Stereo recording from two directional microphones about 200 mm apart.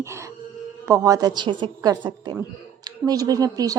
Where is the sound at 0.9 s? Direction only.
15° right (ahead or behind).